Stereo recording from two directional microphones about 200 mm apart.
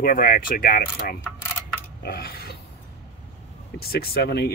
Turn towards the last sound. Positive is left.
turn(degrees=55)  # may be behind; listen again after turning